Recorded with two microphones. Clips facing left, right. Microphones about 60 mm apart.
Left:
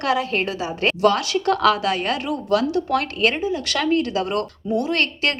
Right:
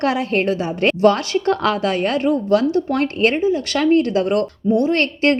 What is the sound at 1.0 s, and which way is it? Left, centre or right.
A woman's voice, right.